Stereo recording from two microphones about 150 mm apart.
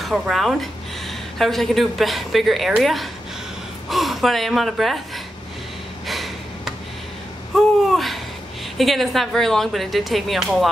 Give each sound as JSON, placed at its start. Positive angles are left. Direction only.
{"t": 0.0, "sound": "speech", "side_deg": 0}
{"t": 6.0, "sound": "a sound", "side_deg": 0}
{"t": 7.5, "sound": "babbling", "side_deg": 0}
{"t": 8.7, "sound": "speech", "side_deg": 0}